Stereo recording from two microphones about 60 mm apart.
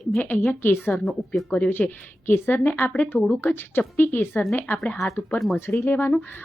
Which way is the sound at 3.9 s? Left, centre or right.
Left.